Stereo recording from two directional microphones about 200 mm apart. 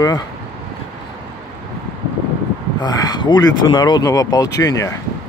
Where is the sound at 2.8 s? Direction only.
20° left (ahead or behind).